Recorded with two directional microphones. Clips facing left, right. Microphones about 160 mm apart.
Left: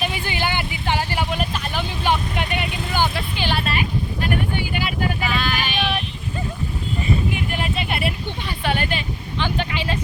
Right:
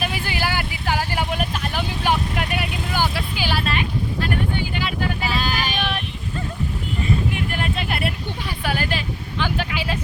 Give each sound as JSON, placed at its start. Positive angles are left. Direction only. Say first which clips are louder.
{"t": 0.0, "sound": "vehicle", "louder": "left 1 dB", "side_deg": -5}
{"t": 4.2, "sound": "vehicle", "louder": "even", "side_deg": 15}
{"t": 5.2, "sound": "vehicle", "louder": "even", "side_deg": -35}
{"t": 7.3, "sound": "vehicle", "louder": "even", "side_deg": 0}
{"t": 8.4, "sound": "a sound", "louder": "left 1 dB", "side_deg": -5}
{"t": 9.6, "sound": "vehicle", "louder": "left 1 dB", "side_deg": -5}